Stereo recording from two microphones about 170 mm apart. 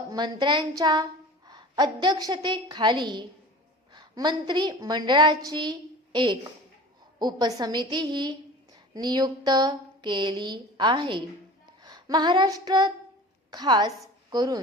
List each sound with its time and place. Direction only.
0.1 s a woman's voice: 25° right (ahead or behind)
11.8 s a sound: 25° right (ahead or behind)
13.5 s a woman's voice: 25° right (ahead or behind)